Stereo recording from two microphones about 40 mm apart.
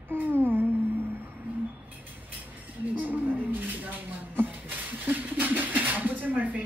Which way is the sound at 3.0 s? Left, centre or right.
Right.